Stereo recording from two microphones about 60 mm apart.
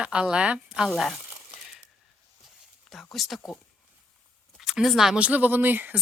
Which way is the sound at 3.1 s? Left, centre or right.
Centre.